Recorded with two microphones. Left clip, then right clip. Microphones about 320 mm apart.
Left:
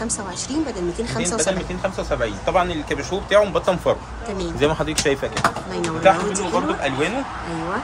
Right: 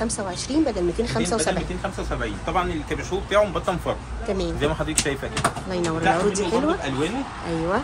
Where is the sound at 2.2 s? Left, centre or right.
Left.